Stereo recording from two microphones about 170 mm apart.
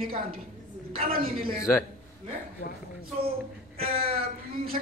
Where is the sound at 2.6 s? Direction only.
80° left.